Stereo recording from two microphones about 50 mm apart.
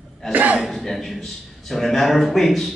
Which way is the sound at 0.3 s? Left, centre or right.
Right.